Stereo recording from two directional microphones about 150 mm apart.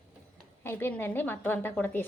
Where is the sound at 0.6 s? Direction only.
15° left (ahead or behind).